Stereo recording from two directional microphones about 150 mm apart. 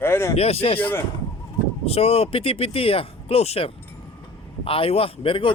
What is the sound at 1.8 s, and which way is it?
Speech, 40° left (ahead or behind).